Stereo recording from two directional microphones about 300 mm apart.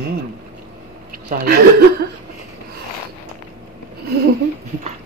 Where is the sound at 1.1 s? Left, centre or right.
Right.